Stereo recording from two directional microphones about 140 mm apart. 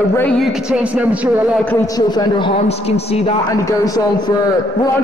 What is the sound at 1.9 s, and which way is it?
A man's voice, 30° left (ahead or behind).